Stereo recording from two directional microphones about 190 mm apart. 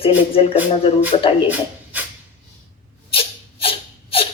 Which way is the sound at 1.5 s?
10° right (ahead or behind).